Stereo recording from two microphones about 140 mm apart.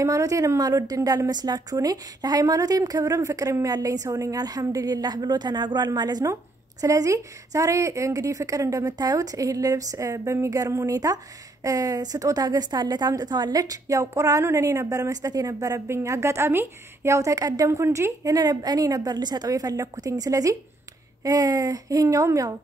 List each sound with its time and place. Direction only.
0.0 s a woman's voice: 20° right (ahead or behind)